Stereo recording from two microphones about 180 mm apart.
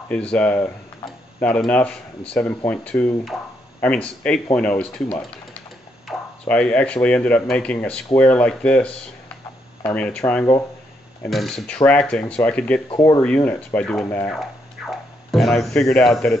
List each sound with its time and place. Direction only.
0.1 s speech: 5° left (ahead or behind)
11.2 s speech: centre (ahead or behind)
12.9 s speech: 25° left (ahead or behind)
13.2 s speech: 10° left (ahead or behind)